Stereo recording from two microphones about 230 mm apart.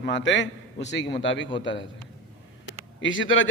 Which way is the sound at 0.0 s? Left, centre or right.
Left.